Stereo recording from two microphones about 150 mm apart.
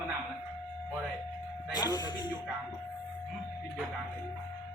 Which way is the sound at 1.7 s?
25° left (ahead or behind).